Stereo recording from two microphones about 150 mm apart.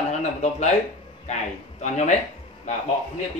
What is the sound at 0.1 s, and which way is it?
Speech, 50° left (ahead or behind).